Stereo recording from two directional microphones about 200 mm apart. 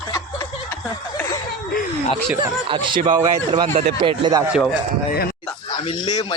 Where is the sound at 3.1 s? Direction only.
25° right (ahead or behind).